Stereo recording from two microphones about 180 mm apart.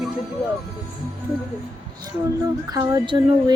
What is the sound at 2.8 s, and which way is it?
Speech, 20° right (ahead or behind).